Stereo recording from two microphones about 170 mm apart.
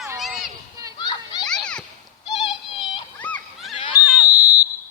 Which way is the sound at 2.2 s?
25° left (ahead or behind).